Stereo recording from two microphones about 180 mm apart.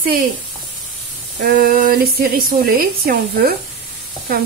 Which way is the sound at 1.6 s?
50° right (ahead or behind).